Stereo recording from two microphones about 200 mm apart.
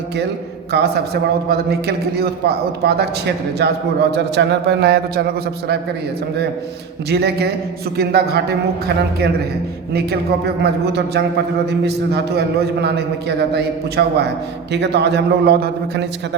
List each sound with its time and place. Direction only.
0.7 s a man's voice: 55° right (ahead or behind)
7.1 s a man's voice: 55° right (ahead or behind)
9.9 s a man's voice: 55° right (ahead or behind)